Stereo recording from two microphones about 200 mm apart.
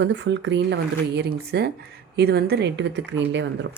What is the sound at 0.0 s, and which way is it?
Speech, 65° right (ahead or behind).